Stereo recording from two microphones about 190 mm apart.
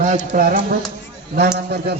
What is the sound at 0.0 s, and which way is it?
Speech, 40° right (ahead or behind).